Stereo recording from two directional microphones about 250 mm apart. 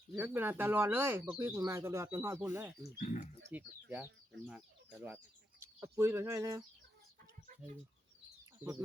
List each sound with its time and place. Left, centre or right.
0.1 s speech: centre
3.0 s speech: left
3.5 s speech: centre